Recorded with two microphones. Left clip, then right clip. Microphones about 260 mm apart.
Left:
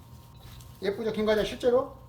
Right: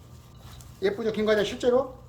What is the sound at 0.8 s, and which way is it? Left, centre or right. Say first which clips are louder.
Speech: right 3 dB; centre.